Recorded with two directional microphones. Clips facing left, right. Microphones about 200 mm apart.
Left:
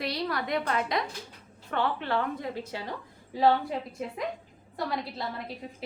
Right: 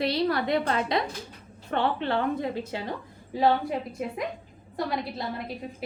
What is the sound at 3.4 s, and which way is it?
A woman's voice, 15° right (ahead or behind).